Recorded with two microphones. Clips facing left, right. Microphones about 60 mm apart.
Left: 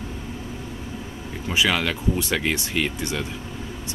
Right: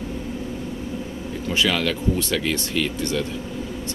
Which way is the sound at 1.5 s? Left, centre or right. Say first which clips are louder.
Even; centre.